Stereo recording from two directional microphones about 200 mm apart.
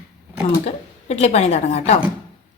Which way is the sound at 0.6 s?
35° left (ahead or behind).